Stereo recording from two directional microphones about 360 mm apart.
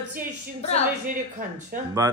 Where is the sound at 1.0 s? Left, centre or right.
Right.